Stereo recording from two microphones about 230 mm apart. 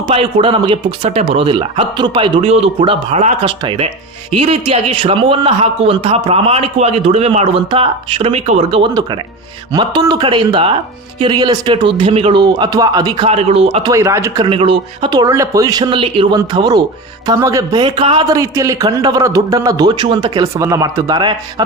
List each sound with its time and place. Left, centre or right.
0.1 s speech: right
13.9 s a man's voice: centre